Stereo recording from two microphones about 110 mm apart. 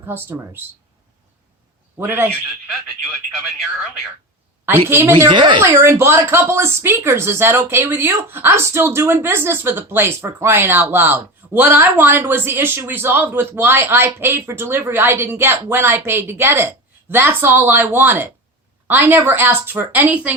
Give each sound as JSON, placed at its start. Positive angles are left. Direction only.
{"t": 0.0, "sound": "speech", "side_deg": -20}
{"t": 2.0, "sound": "speech", "side_deg": -20}
{"t": 4.9, "sound": "speech", "side_deg": -20}
{"t": 5.3, "sound": "a woman's voice", "side_deg": -45}
{"t": 5.7, "sound": "speech", "side_deg": -20}